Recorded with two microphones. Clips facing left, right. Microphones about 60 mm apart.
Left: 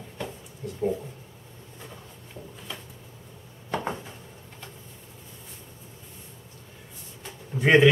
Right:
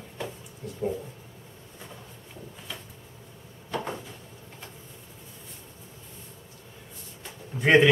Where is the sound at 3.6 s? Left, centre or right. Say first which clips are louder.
Left 2 dB; left.